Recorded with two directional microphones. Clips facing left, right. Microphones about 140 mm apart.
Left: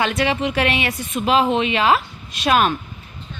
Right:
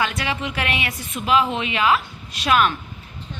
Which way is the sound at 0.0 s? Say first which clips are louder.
Left 5 dB; 25° left (ahead or behind).